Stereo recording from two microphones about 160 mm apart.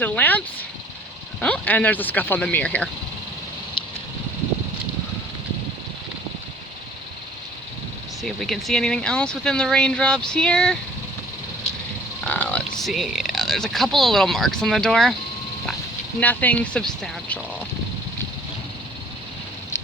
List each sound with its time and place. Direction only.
0.0 s speech: 10° left (ahead or behind)
3.8 s a sound: 35° left (ahead or behind)
8.2 s speech: centre (ahead or behind)
12.2 s frog: 10° left (ahead or behind)
12.9 s speech: centre (ahead or behind)
16.2 s speech: 10° left (ahead or behind)